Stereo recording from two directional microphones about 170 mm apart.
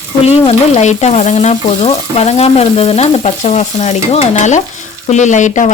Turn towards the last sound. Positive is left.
turn(degrees=45)  # may be behind; listen again after turning